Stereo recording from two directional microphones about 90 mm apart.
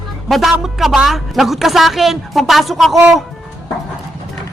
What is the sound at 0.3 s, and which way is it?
A man's voice, centre (ahead or behind).